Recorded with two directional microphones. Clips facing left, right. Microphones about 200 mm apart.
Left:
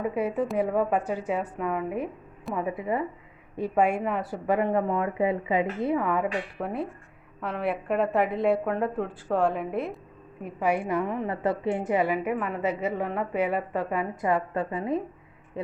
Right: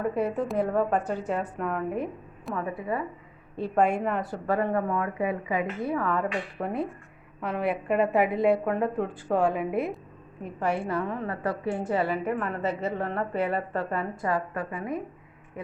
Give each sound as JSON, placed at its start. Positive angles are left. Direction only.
{"t": 0.0, "sound": "a woman's voice", "side_deg": 10}
{"t": 2.6, "sound": "a woman's voice", "side_deg": 20}
{"t": 3.5, "sound": "a woman's voice", "side_deg": 10}
{"t": 4.4, "sound": "a woman's voice", "side_deg": 20}
{"t": 6.6, "sound": "a woman's voice", "side_deg": 0}
{"t": 10.4, "sound": "a woman's voice", "side_deg": 10}